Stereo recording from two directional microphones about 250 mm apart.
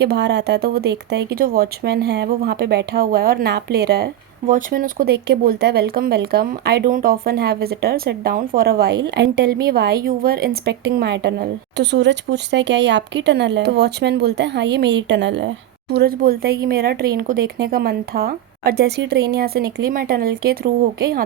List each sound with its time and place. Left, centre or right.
0.0 s speech: right